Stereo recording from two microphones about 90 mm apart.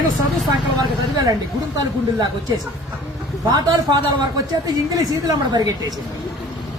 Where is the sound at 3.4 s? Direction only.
50° right (ahead or behind).